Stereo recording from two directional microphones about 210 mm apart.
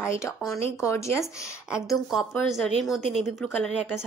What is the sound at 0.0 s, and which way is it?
Speech, 15° left (ahead or behind).